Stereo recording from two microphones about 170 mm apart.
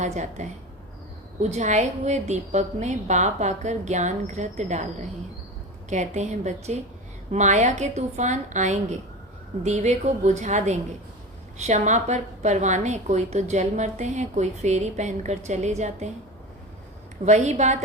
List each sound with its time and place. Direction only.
0.0 s a woman's voice: 45° right (ahead or behind)
5.9 s a woman's voice: 45° right (ahead or behind)
17.2 s a woman's voice: 45° right (ahead or behind)